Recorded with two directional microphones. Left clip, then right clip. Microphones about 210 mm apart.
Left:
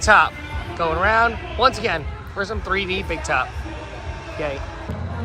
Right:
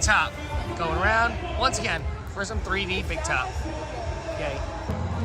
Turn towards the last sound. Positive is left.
turn(degrees=0)  # may be behind; listen again after turning